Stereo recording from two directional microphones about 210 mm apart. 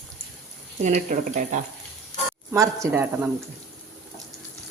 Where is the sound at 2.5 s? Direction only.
15° right (ahead or behind).